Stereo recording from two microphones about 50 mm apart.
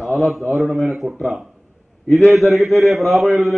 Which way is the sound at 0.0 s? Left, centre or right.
Centre.